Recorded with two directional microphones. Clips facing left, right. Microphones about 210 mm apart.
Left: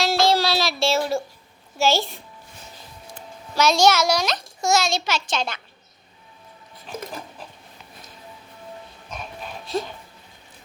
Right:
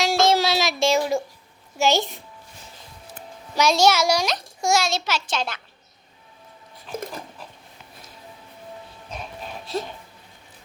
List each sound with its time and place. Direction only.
0.0 s child singing: 20° right (ahead or behind)
1.8 s a child's voice: 20° right (ahead or behind)
3.5 s a child's voice: 10° right (ahead or behind)